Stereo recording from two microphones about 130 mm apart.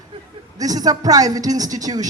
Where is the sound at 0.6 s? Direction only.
30° right (ahead or behind).